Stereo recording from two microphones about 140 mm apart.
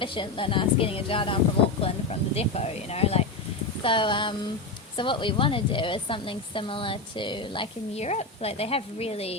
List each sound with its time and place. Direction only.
0.0 s a woman's voice: 35° left (ahead or behind)
8.0 s speech: 50° left (ahead or behind)